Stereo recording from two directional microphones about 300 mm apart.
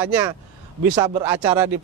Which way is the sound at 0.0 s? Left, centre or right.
Centre.